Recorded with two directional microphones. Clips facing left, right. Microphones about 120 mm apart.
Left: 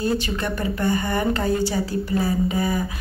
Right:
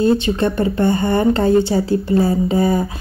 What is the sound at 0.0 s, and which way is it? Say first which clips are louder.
Speech: right 8 dB; 25° right (ahead or behind).